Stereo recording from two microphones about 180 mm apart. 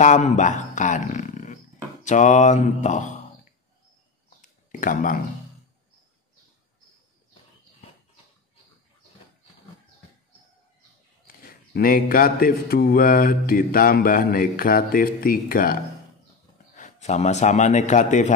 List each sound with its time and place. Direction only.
0.0 s speech: 40° left (ahead or behind)
2.0 s mantra: 40° left (ahead or behind)
4.4 s a sound: 50° left (ahead or behind)
11.2 s speech: 55° left (ahead or behind)
16.7 s a man's voice: 40° left (ahead or behind)